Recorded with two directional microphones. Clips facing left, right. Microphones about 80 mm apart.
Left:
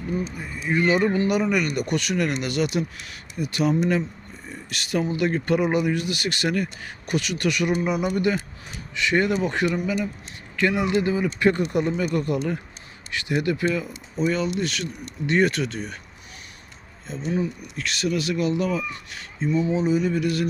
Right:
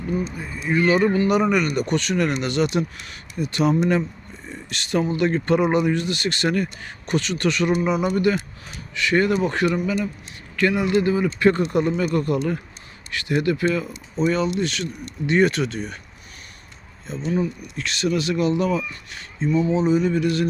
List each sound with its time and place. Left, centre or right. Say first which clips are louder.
0.7 s speech: right 2 dB; centre
14.2 s speech: right 3 dB; centre
17.1 s speech: right 2 dB; centre